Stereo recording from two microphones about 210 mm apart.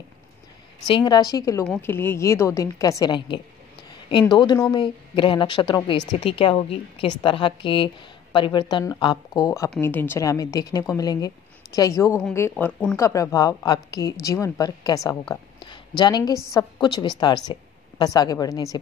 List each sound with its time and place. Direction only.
0.8 s a woman's voice: 20° left (ahead or behind)